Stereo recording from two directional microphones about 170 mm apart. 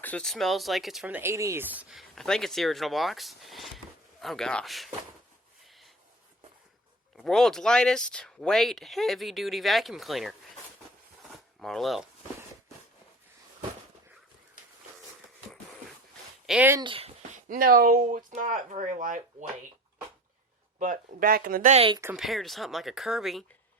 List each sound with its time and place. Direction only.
0.0 s speech: 5° left (ahead or behind)
7.2 s speech: centre (ahead or behind)
11.3 s a sound: centre (ahead or behind)
16.5 s speech: 10° right (ahead or behind)
16.8 s speech: 30° right (ahead or behind)
17.3 s speech: 55° right (ahead or behind)
20.7 s speech: 50° right (ahead or behind)
21.8 s speech: 30° right (ahead or behind)
22.1 s speech: centre (ahead or behind)